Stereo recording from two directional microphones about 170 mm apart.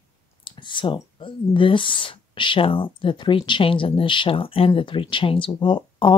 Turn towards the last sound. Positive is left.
turn(degrees=30)  # may be behind; listen again after turning